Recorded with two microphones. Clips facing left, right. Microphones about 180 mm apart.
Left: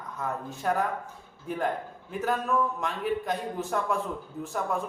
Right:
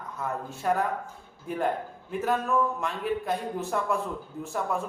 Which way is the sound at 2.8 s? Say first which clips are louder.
Even; 5° right (ahead or behind).